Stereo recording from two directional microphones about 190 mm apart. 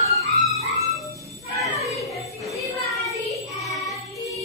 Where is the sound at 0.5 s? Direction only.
35° left (ahead or behind).